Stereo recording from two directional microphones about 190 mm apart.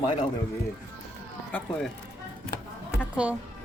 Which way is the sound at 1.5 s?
5° left (ahead or behind).